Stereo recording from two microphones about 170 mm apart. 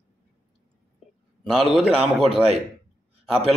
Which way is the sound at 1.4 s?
Centre (ahead or behind).